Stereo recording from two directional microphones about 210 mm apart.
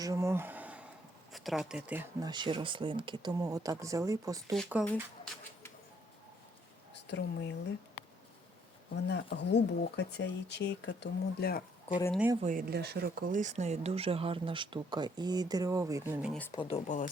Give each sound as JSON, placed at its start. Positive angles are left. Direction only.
{"t": 0.0, "sound": "a sound", "side_deg": -15}
{"t": 1.3, "sound": "speech", "side_deg": 0}
{"t": 2.2, "sound": "speech", "side_deg": -20}
{"t": 4.5, "sound": "speech", "side_deg": 0}
{"t": 6.9, "sound": "speech", "side_deg": 55}
{"t": 9.0, "sound": "speech", "side_deg": 55}
{"t": 12.4, "sound": "speech", "side_deg": -40}
{"t": 16.5, "sound": "speech", "side_deg": 25}